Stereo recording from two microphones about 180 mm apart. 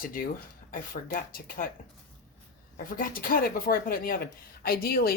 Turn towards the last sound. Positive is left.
turn(degrees=55)  # may be behind; listen again after turning